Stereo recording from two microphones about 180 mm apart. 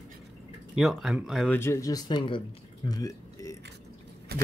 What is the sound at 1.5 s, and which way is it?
Speech, 15° left (ahead or behind).